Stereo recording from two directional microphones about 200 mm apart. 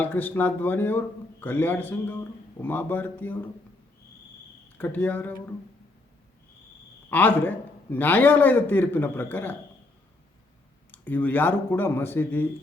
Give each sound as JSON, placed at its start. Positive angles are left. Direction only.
{"t": 0.0, "sound": "a man's voice", "side_deg": 10}
{"t": 4.8, "sound": "a man's voice", "side_deg": 10}
{"t": 7.1, "sound": "a man's voice", "side_deg": 10}
{"t": 10.9, "sound": "a man's voice", "side_deg": 10}